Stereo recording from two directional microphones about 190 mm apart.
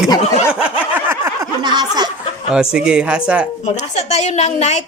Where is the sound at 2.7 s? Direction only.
5° right (ahead or behind).